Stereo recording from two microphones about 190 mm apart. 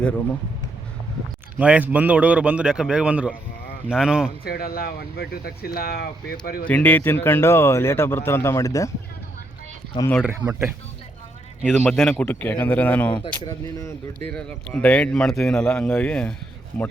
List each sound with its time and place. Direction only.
1.5 s a man's voice: 5° right (ahead or behind)
4.4 s speech: 55° left (ahead or behind)
6.7 s speech: 10° left (ahead or behind)
11.6 s speech: 10° left (ahead or behind)
13.1 s speech: 25° left (ahead or behind)
14.3 s a man's voice: 5° left (ahead or behind)